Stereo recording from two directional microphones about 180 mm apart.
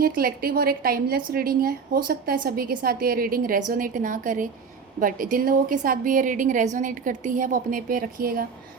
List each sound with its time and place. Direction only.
0.0 s a woman's voice: 55° right (ahead or behind)